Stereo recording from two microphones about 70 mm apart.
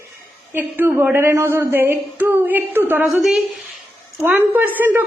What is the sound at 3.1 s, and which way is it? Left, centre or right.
Speech, centre.